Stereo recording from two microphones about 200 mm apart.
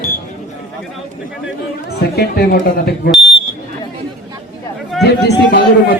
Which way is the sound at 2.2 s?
50° left (ahead or behind).